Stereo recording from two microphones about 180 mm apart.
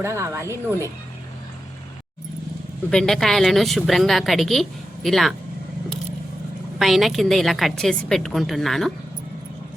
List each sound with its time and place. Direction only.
0.0 s a woman's voice: 15° right (ahead or behind)
2.9 s a woman's voice: centre (ahead or behind)
6.7 s a woman's voice: centre (ahead or behind)